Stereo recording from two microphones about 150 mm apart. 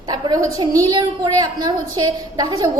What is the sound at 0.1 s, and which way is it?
A woman's voice, 25° right (ahead or behind).